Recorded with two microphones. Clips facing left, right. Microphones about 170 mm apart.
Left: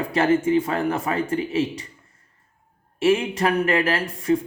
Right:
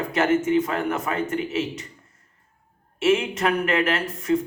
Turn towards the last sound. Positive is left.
turn(degrees=30)  # may be behind; listen again after turning